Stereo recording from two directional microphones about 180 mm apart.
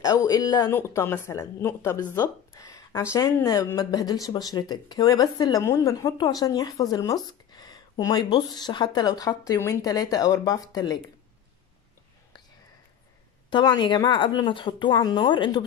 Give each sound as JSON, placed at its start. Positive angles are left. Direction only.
{"t": 0.0, "sound": "speech", "side_deg": 20}
{"t": 13.5, "sound": "speech", "side_deg": 25}